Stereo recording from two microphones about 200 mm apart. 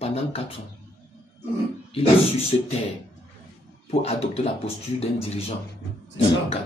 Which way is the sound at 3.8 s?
30° left (ahead or behind).